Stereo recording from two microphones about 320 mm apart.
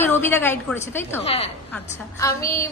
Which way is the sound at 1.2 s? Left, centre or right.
Centre.